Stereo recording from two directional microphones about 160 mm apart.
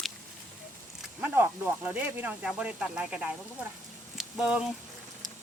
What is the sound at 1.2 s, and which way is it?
Speech, 10° right (ahead or behind).